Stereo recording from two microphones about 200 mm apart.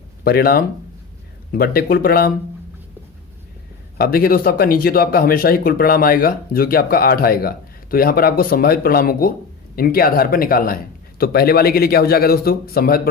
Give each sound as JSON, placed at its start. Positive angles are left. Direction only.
{"t": 0.3, "sound": "speech", "side_deg": 50}
{"t": 3.9, "sound": "speech", "side_deg": 50}